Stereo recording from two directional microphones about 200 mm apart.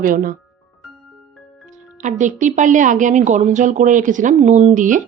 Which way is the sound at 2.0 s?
40° right (ahead or behind).